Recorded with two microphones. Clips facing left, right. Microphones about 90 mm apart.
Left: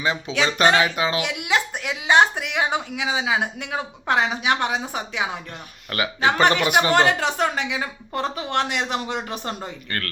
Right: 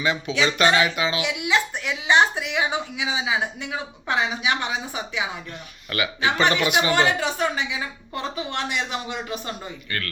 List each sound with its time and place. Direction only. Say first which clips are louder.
0.0 s speech: even; 30° left (ahead or behind)
1.2 s a woman's voice: even; 55° left (ahead or behind)